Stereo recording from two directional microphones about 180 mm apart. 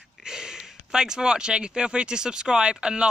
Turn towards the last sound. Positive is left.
turn(degrees=-5)  # may be behind; listen again after turning